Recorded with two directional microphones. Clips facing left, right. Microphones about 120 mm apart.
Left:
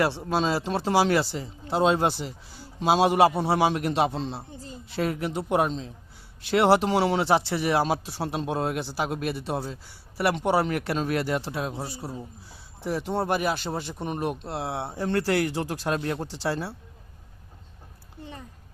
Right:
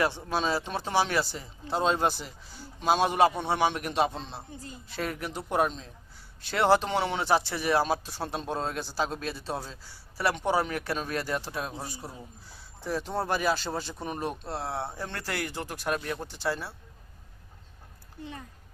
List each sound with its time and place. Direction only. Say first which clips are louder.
0.3 s speech: left 4 dB; 30° left (ahead or behind)